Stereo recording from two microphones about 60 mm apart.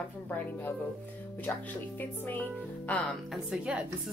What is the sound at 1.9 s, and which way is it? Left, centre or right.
Speech, left.